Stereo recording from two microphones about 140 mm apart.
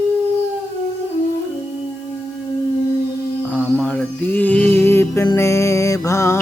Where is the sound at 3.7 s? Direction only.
10° left (ahead or behind).